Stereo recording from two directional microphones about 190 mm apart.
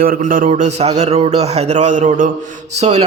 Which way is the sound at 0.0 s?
45° right (ahead or behind).